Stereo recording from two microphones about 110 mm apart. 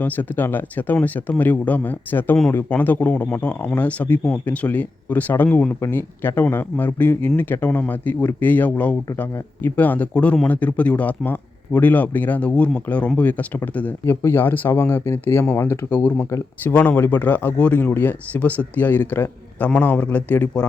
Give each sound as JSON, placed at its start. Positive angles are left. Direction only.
{"t": 0.0, "sound": "speech", "side_deg": 15}